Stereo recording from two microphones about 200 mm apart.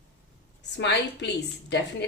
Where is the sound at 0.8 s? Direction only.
60° left (ahead or behind).